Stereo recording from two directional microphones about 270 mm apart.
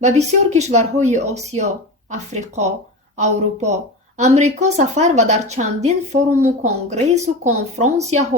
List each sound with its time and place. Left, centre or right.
0.0 s speech: right